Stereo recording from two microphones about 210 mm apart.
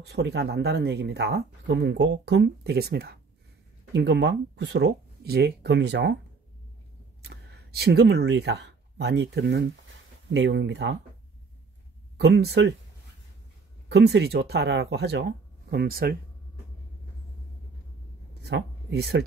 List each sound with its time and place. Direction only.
0.0 s speech: 50° right (ahead or behind)
7.2 s speech: 50° right (ahead or behind)
12.2 s speech: 55° right (ahead or behind)
13.8 s speech: 55° right (ahead or behind)
18.4 s speech: 55° right (ahead or behind)